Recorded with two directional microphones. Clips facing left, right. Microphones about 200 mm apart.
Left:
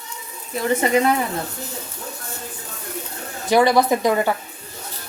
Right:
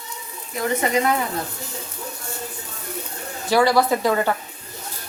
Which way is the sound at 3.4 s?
20° left (ahead or behind).